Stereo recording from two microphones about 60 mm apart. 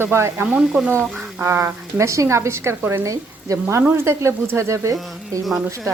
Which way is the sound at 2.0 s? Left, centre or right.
Right.